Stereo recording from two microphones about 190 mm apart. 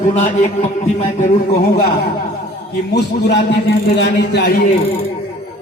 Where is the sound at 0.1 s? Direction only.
40° left (ahead or behind).